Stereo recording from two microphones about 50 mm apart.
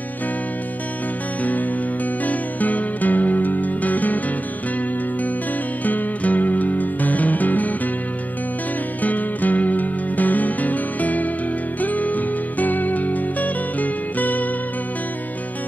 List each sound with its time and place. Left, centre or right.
1.4 s music: left
5.9 s music: left
9.0 s music: left